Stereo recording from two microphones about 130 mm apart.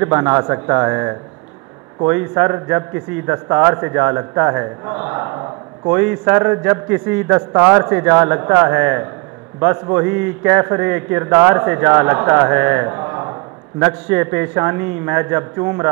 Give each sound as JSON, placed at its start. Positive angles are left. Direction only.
{"t": 0.0, "sound": "a man's voice", "side_deg": -15}